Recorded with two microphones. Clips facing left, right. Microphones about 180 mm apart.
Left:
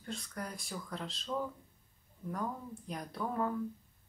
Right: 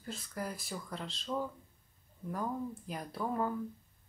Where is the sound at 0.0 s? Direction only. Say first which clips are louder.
Right 2 dB; 5° right (ahead or behind).